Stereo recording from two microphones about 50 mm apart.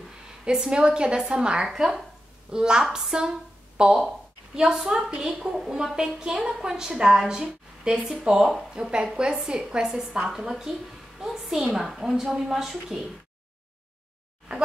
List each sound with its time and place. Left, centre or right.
0.5 s a woman's voice: centre
1.7 s a woman's voice: centre